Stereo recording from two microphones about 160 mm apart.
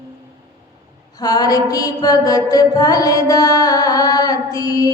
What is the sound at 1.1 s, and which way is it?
Mantra, 25° left (ahead or behind).